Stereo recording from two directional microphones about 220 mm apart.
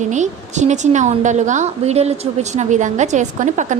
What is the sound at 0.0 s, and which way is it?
A woman's voice, 30° right (ahead or behind).